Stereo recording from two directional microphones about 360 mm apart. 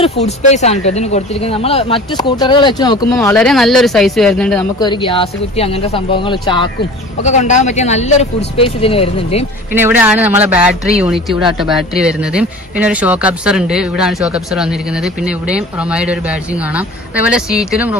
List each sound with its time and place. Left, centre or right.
0.0 s speech: centre
9.8 s a man's voice: centre
17.3 s a man's voice: centre